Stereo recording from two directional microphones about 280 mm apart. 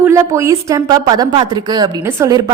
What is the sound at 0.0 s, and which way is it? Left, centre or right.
A woman's voice, centre.